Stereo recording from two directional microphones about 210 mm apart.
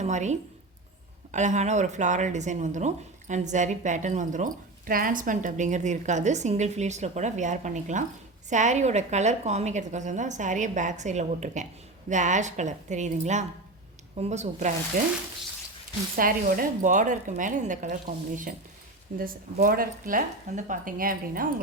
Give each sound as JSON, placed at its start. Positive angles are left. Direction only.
{"t": 0.0, "sound": "speech", "side_deg": -35}
{"t": 16.1, "sound": "speech", "side_deg": -40}
{"t": 19.2, "sound": "speech", "side_deg": -45}